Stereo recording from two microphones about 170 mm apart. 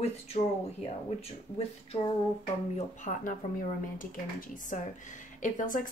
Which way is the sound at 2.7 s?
45° left (ahead or behind).